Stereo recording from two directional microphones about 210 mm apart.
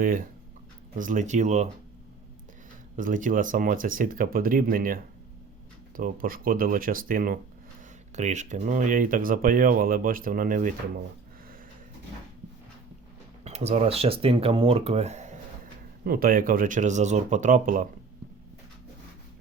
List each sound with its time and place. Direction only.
0.9 s speech: 35° right (ahead or behind)
2.9 s speech: 40° right (ahead or behind)
6.0 s speech: 40° right (ahead or behind)
13.4 s speech: 30° right (ahead or behind)
16.0 s speech: 45° right (ahead or behind)